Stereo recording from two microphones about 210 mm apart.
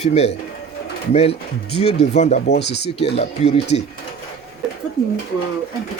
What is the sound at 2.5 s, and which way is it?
Speech, 55° left (ahead or behind).